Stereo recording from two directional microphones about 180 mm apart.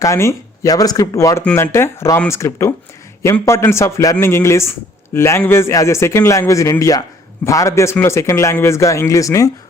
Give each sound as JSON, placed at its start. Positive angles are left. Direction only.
{"t": 0.0, "sound": "a man's voice", "side_deg": 15}